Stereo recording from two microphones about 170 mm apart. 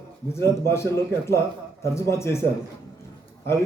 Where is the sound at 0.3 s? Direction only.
15° left (ahead or behind).